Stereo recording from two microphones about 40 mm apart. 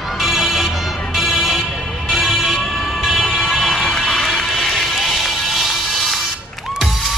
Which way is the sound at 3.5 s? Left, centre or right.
Centre.